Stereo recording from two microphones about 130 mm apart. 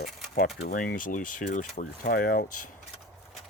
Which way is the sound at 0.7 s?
90° left.